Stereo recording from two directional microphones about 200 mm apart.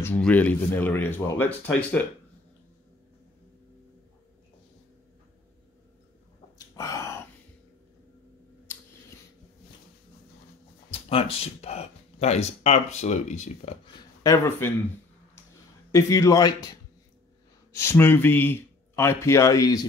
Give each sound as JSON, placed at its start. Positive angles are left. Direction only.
{"t": 0.0, "sound": "speech", "side_deg": 5}
{"t": 6.7, "sound": "a sound", "side_deg": 15}
{"t": 10.9, "sound": "speech", "side_deg": 30}
{"t": 14.2, "sound": "speech", "side_deg": 15}
{"t": 15.9, "sound": "speech", "side_deg": 15}
{"t": 17.7, "sound": "speech", "side_deg": 10}